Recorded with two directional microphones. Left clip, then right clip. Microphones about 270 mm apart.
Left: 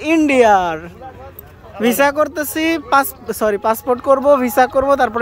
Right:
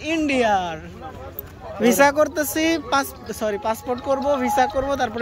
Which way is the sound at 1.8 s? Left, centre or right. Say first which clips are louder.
Left 2 dB; centre.